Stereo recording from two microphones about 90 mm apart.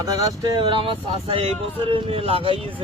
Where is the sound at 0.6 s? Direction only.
80° right.